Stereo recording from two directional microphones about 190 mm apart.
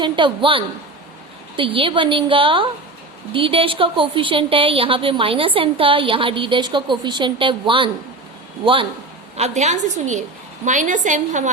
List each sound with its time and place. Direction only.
0.0 s a woman's voice: 25° right (ahead or behind)
9.4 s a woman's voice: 35° right (ahead or behind)